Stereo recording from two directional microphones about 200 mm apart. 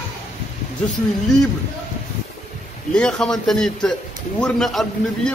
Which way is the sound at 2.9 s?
5° left (ahead or behind).